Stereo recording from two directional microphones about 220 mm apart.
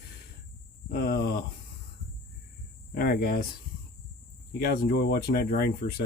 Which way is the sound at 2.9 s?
45° left (ahead or behind).